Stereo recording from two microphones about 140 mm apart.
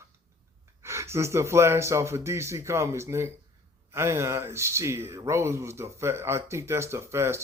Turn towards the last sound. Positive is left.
turn(degrees=-20)  # may be behind; listen again after turning